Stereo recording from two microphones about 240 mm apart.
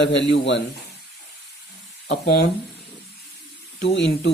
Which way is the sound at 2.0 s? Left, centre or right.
Left.